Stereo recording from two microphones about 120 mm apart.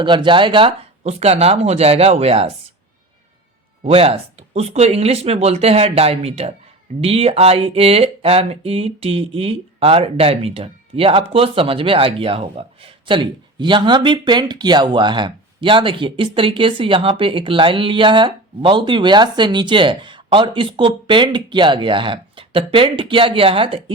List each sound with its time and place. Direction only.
0.0 s speech: 45° right (ahead or behind)
1.0 s speech: 60° right (ahead or behind)
3.8 s speech: 55° right (ahead or behind)